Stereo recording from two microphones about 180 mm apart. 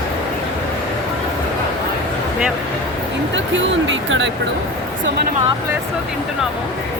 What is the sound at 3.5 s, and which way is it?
Speech, 90° right.